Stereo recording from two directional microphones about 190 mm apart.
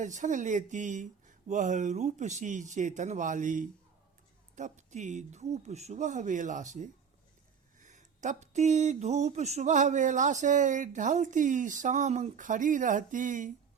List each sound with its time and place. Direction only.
0.0 s speech: 40° right (ahead or behind)